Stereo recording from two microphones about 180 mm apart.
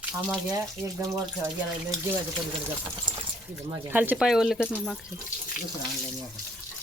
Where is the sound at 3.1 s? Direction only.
25° right (ahead or behind).